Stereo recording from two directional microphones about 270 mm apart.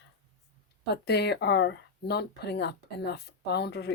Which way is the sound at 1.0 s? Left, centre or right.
Left.